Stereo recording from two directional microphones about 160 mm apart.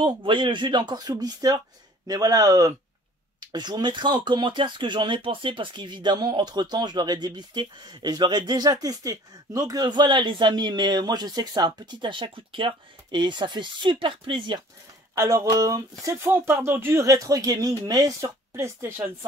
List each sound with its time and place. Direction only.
0.0 s speech: 30° right (ahead or behind)
15.1 s speech: 20° right (ahead or behind)